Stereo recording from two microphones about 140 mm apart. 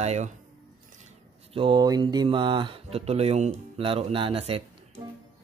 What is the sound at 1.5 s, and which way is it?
Speech, 35° right (ahead or behind).